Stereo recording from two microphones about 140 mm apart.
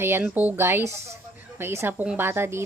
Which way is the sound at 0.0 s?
15° right (ahead or behind).